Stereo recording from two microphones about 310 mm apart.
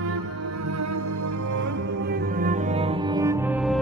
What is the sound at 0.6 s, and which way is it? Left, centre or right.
Music, right.